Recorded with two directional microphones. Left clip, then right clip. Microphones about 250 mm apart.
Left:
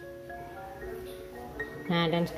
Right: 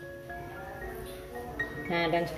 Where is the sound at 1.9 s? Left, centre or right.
Left.